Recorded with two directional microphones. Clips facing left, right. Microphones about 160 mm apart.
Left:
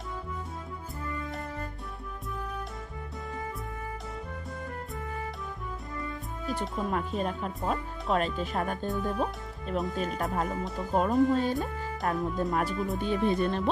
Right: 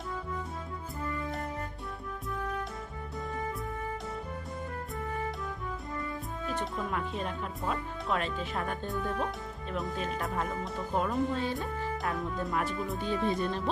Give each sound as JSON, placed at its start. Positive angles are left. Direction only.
{"t": 6.4, "sound": "music", "side_deg": 10}
{"t": 6.9, "sound": "speech", "side_deg": 40}
{"t": 13.1, "sound": "speech", "side_deg": 60}